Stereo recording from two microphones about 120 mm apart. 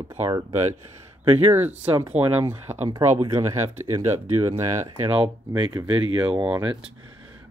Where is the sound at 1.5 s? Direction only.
15° right (ahead or behind).